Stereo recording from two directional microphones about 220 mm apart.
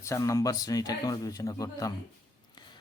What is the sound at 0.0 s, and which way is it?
Speech, 15° left (ahead or behind).